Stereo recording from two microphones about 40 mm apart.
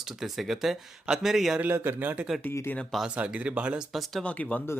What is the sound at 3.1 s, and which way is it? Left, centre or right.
Speech, right.